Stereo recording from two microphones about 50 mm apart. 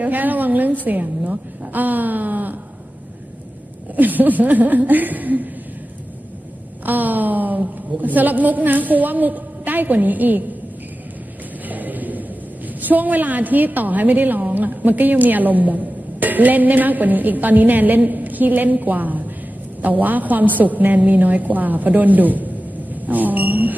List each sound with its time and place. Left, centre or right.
0.0 s a woman's voice: right
3.9 s a woman's voice: right
6.8 s a woman's voice: right
11.6 s a sound: right
12.6 s a woman's voice: right